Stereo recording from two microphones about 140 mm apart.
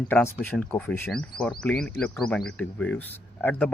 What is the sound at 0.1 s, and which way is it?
Speech, 10° left (ahead or behind).